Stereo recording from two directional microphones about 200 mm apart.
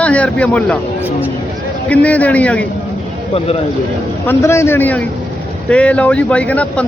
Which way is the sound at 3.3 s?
30° left (ahead or behind).